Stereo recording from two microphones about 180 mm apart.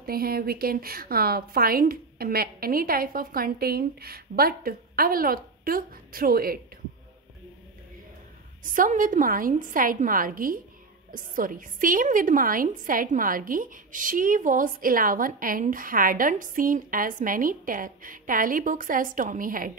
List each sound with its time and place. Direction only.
0.0 s a woman's voice: 55° right (ahead or behind)
8.6 s a woman's voice: 50° right (ahead or behind)